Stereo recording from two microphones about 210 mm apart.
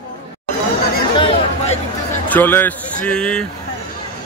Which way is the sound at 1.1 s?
30° left (ahead or behind).